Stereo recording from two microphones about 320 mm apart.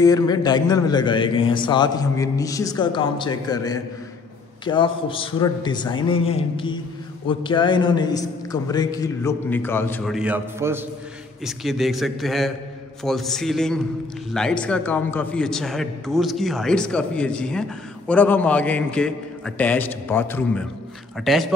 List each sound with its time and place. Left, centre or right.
0.0 s a man's voice: centre